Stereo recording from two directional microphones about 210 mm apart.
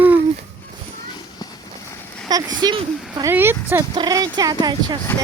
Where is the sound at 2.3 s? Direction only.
20° right (ahead or behind).